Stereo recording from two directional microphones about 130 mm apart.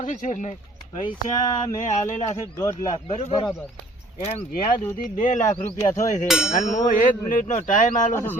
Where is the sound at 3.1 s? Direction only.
55° left (ahead or behind).